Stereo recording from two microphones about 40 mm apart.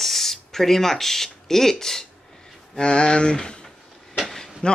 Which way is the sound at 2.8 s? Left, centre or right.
Left.